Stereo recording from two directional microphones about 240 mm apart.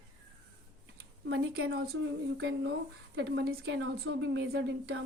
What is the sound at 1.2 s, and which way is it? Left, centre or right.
A woman's voice, right.